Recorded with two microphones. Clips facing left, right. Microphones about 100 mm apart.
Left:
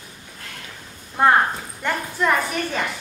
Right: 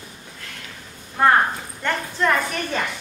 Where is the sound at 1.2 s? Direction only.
20° left (ahead or behind).